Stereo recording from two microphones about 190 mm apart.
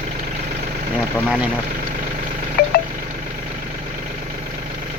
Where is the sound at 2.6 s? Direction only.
55° left (ahead or behind).